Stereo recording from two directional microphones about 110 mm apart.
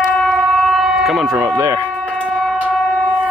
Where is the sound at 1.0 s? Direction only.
Centre (ahead or behind).